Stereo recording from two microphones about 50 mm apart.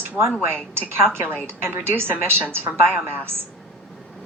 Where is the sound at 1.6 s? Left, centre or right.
Right.